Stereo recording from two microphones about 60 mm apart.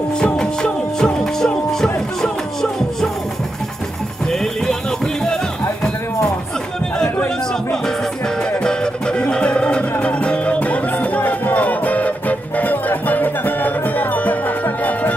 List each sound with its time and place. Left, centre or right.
0.2 s music: centre
4.3 s music: centre
8.5 s music: centre